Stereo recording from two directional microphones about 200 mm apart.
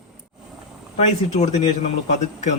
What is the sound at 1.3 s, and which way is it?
A man's voice, 35° left (ahead or behind).